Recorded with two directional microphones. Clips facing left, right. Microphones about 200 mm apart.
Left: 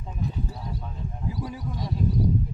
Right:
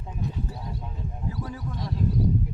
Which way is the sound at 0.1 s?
10° right (ahead or behind).